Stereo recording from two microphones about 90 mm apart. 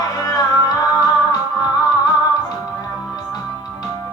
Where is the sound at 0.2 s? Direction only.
40° left (ahead or behind).